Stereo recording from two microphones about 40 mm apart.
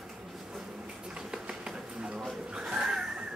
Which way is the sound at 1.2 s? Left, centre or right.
Right.